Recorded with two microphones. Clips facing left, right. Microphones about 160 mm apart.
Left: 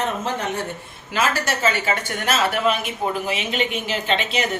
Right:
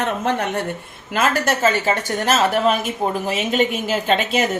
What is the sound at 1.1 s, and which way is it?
Speech, 50° right (ahead or behind).